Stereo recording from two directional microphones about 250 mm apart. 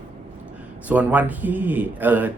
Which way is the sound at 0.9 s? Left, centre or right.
Centre.